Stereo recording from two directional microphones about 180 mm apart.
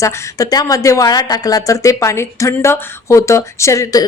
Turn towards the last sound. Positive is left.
turn(degrees=20)  # may be behind; listen again after turning